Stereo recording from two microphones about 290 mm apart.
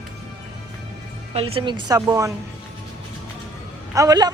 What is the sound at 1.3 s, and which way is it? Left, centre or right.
A woman's voice, centre.